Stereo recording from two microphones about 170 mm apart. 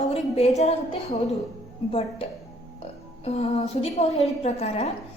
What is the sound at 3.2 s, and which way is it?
A woman's voice, 35° left (ahead or behind).